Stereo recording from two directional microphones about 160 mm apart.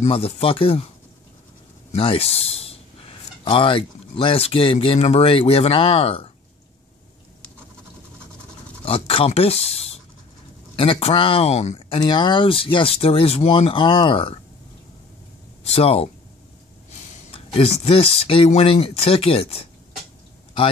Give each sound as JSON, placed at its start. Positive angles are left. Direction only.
{"t": 0.0, "sound": "speech", "side_deg": 40}
{"t": 1.9, "sound": "a man's voice", "side_deg": 35}
{"t": 8.8, "sound": "speech", "side_deg": 35}
{"t": 15.6, "sound": "speech", "side_deg": 40}
{"t": 17.3, "sound": "speech", "side_deg": 40}